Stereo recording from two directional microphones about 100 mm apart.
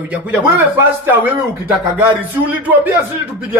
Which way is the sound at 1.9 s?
20° right (ahead or behind).